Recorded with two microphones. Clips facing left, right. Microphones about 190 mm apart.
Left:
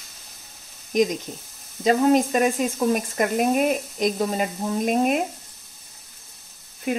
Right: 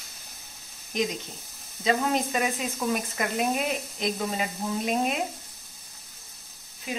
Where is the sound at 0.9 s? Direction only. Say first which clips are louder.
Left 8 dB; 45° left (ahead or behind).